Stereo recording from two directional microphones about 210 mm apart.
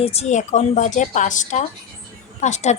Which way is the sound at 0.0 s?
30° left (ahead or behind).